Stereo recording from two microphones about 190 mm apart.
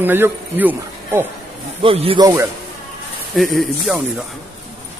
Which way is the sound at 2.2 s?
15° right (ahead or behind).